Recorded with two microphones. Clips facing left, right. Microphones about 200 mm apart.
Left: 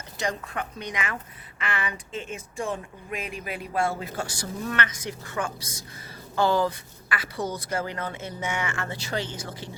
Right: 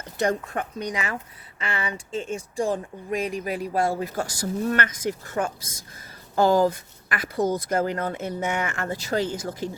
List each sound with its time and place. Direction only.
0.2 s speech: 45° right (ahead or behind)